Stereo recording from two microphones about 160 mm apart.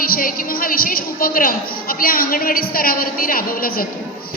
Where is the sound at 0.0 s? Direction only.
60° left (ahead or behind).